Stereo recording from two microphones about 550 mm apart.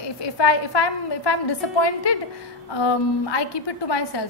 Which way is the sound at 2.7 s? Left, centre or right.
Left.